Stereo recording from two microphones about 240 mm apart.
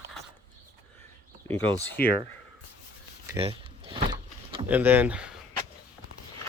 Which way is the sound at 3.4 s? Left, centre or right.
Right.